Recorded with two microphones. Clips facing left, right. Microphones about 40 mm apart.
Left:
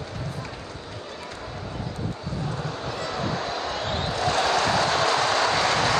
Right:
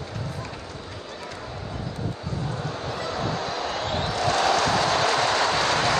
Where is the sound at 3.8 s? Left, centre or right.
Left.